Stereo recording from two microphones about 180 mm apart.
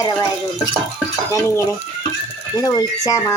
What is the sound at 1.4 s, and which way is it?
Speech, 15° left (ahead or behind).